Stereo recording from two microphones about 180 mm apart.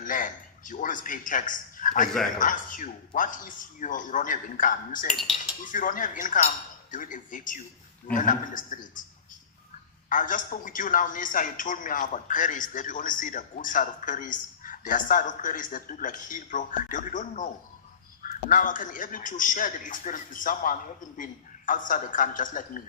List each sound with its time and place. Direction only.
0.0 s a man's voice: 45° left (ahead or behind)
5.0 s speech: centre (ahead or behind)
5.6 s a man's voice: 50° left (ahead or behind)
10.1 s a man's voice: 45° left (ahead or behind)